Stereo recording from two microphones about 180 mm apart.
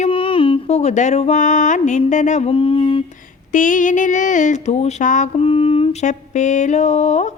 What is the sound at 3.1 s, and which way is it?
Music, 45° left (ahead or behind).